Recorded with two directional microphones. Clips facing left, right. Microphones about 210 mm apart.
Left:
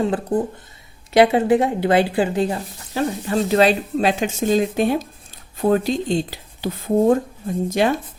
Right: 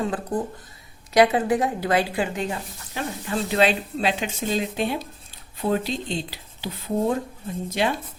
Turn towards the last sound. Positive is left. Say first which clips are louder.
# left 6 dB
turn(degrees=45)  # may be behind; listen again after turning